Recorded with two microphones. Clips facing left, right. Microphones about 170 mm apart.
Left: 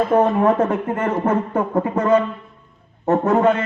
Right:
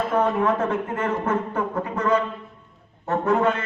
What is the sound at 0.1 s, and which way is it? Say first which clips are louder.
Speech: left 5 dB; 40° left (ahead or behind).